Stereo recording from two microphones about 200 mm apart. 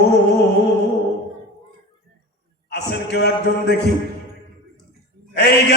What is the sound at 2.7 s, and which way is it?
A man's voice, 55° left (ahead or behind).